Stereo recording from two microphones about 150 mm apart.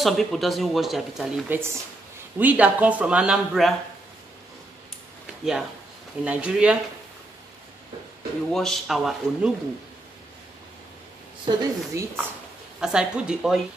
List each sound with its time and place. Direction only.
0.0 s speech: centre (ahead or behind)
1.5 s speech: 15° right (ahead or behind)
5.2 s a sound: 5° right (ahead or behind)
6.2 s speech: 10° right (ahead or behind)
8.5 s speech: centre (ahead or behind)
11.4 s speech: 20° right (ahead or behind)
12.8 s speech: 5° right (ahead or behind)